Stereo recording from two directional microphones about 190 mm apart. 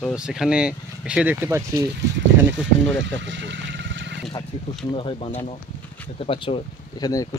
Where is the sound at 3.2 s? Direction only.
70° right (ahead or behind).